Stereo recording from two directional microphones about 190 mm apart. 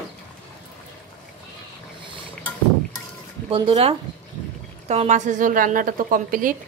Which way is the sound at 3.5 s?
30° right (ahead or behind).